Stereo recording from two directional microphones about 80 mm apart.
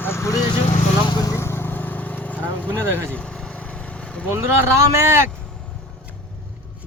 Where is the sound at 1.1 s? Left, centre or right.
Left.